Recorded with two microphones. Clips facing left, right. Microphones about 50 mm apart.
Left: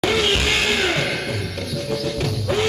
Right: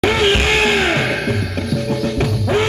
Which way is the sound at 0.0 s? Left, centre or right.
Right.